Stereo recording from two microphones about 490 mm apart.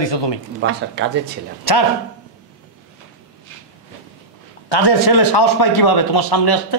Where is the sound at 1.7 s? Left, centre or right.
Left.